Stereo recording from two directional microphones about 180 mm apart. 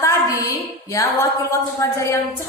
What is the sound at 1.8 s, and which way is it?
Speech, 15° left (ahead or behind).